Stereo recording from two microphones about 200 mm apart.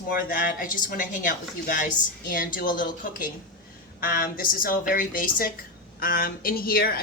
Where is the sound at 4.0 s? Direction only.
45° left (ahead or behind).